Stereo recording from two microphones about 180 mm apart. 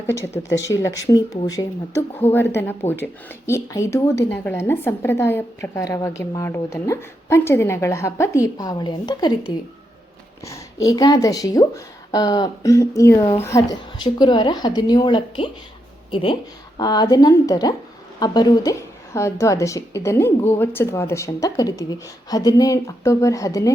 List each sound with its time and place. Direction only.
0.4 s speech: 20° left (ahead or behind)